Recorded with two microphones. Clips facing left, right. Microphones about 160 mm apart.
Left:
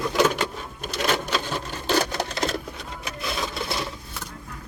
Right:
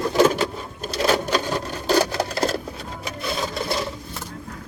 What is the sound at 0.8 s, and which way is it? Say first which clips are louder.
Sewing machine: right 4 dB; 35° right (ahead or behind).